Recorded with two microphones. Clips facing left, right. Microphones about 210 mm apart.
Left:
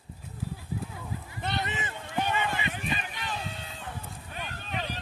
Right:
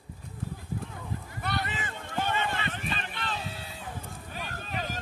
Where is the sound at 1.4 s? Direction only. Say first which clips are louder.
Left 1 dB; 20° left (ahead or behind).